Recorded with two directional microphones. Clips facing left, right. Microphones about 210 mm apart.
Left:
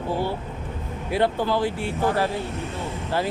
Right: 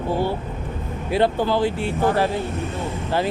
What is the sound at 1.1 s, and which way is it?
Speech, 30° right (ahead or behind).